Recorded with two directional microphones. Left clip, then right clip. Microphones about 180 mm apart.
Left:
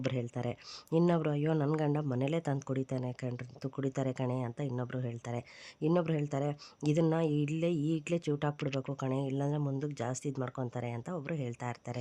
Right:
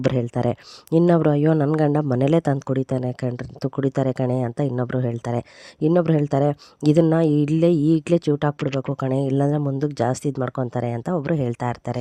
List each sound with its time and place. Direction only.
0.1 s speech: 55° right (ahead or behind)